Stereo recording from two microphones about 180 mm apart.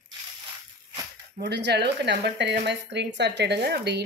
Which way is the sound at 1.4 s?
70° right (ahead or behind).